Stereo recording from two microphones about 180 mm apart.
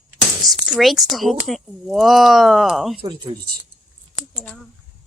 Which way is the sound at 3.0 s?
30° right (ahead or behind).